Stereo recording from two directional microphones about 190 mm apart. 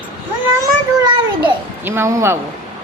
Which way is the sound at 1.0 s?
25° right (ahead or behind).